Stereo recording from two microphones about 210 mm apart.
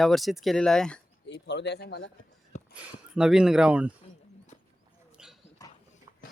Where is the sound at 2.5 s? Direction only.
35° left (ahead or behind).